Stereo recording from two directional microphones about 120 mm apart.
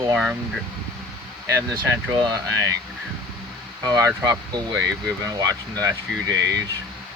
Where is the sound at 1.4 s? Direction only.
25° right (ahead or behind).